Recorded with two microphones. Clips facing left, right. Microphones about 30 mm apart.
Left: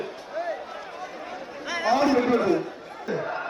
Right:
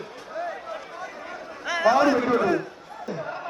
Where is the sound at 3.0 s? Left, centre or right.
Centre.